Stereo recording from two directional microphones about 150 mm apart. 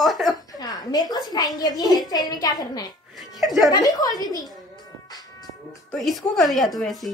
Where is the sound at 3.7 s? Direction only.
25° left (ahead or behind).